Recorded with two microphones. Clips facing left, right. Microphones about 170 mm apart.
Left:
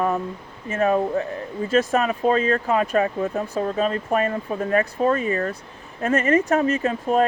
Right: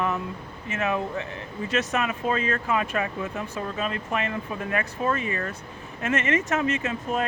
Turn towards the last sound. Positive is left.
turn(degrees=35)  # may be behind; listen again after turning